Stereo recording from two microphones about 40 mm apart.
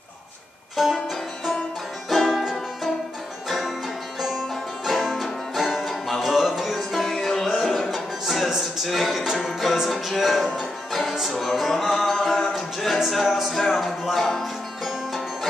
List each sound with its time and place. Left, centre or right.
0.9 s music: centre
5.0 s music: centre
8.5 s a capella: centre
8.8 s music: centre